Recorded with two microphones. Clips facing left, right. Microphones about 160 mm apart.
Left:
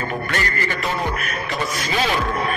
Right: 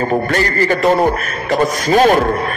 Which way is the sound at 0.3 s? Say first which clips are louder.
Right 9 dB; 35° right (ahead or behind).